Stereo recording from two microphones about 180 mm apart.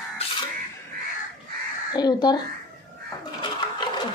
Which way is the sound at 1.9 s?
25° left (ahead or behind).